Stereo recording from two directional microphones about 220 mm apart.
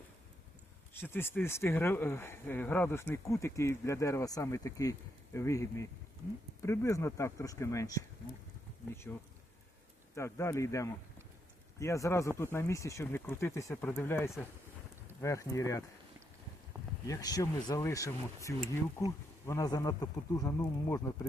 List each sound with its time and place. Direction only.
0.9 s speech: 10° left (ahead or behind)
10.2 s speech: 10° left (ahead or behind)
17.1 s speech: 15° left (ahead or behind)